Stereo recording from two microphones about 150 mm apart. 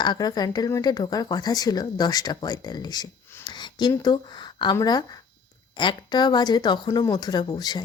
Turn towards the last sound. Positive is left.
turn(degrees=25)  # may be behind; listen again after turning